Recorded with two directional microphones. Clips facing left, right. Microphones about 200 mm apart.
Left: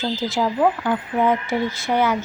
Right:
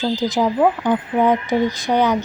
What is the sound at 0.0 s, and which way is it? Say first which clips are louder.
A woman's voice: right 4 dB; 15° right (ahead or behind).